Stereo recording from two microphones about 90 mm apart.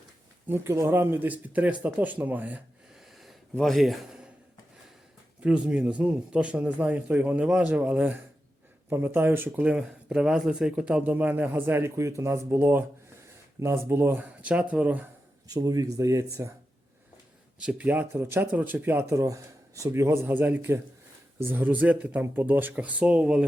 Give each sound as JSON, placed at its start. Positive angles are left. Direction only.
{"t": 0.4, "sound": "speech", "side_deg": -25}
{"t": 2.9, "sound": "a sound", "side_deg": 0}
{"t": 3.5, "sound": "a man's voice", "side_deg": 0}
{"t": 5.4, "sound": "a man's voice", "side_deg": -15}
{"t": 9.6, "sound": "speech", "side_deg": -10}
{"t": 14.4, "sound": "a man's voice", "side_deg": -15}
{"t": 15.4, "sound": "speech", "side_deg": -40}
{"t": 17.6, "sound": "speech", "side_deg": -15}
{"t": 19.1, "sound": "a man's voice", "side_deg": -40}